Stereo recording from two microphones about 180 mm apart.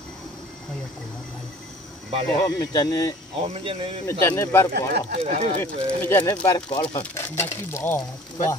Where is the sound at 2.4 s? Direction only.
20° left (ahead or behind).